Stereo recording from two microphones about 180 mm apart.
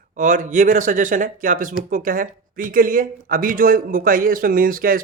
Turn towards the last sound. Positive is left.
turn(degrees=-50)  # may be behind; listen again after turning